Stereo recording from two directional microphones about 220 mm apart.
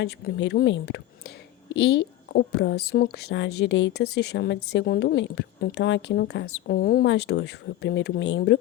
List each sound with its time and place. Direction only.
0.0 s a woman's voice: 55° left (ahead or behind)